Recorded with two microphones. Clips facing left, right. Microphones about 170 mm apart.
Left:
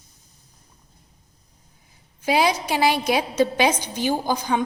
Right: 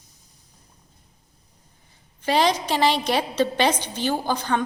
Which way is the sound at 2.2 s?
10° left (ahead or behind).